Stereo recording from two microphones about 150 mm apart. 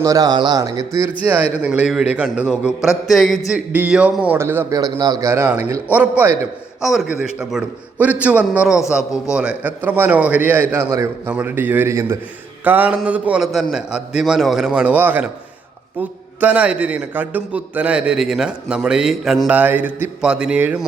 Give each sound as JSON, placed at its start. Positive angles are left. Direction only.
{"t": 0.0, "sound": "speech", "side_deg": -25}
{"t": 1.6, "sound": "a man's voice", "side_deg": -10}
{"t": 3.7, "sound": "a man's voice", "side_deg": -10}
{"t": 6.8, "sound": "a man's voice", "side_deg": 0}